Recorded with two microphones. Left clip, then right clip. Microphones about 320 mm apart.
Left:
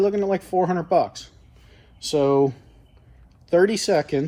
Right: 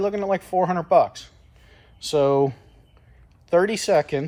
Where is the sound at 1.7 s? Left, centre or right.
Right.